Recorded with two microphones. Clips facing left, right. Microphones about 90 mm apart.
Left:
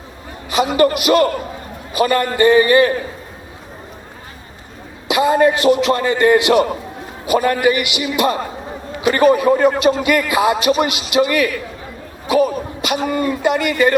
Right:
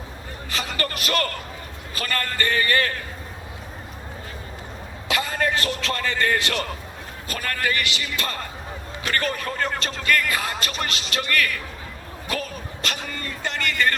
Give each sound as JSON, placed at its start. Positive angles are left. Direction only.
{"t": 0.5, "sound": "a man's voice", "side_deg": 15}
{"t": 5.0, "sound": "a man's voice", "side_deg": 15}